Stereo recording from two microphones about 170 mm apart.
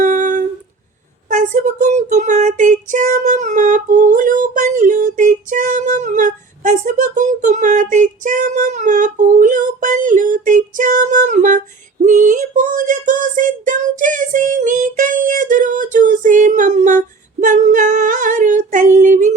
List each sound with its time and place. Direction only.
0.0 s humming: 50° right (ahead or behind)
1.3 s child singing: 45° right (ahead or behind)